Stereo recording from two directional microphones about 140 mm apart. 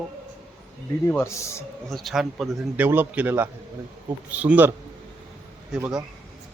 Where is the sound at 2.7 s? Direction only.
15° right (ahead or behind).